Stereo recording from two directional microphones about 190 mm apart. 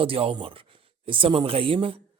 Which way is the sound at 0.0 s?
30° right (ahead or behind).